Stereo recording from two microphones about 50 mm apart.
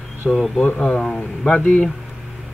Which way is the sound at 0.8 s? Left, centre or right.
Left.